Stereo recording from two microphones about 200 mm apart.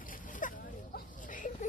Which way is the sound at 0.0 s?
40° left (ahead or behind).